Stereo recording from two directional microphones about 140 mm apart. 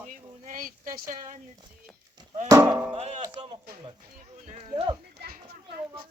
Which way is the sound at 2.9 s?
45° right (ahead or behind).